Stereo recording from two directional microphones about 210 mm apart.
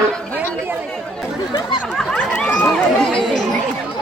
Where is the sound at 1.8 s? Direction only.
Centre (ahead or behind).